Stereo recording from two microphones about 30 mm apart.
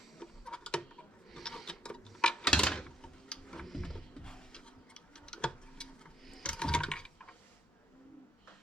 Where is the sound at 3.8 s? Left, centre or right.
Left.